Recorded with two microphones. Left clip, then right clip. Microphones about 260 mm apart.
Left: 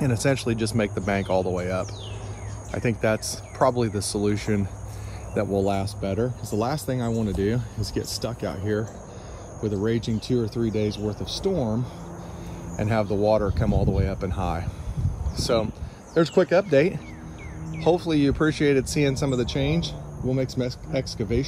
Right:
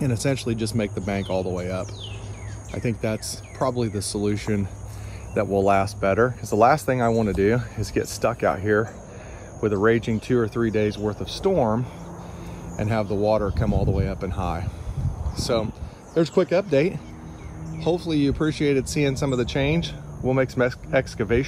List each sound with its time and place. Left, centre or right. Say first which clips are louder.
0.0 s speech: left 1 dB; centre
6.1 s speech: right 6 dB; centre
12.7 s speech: even; centre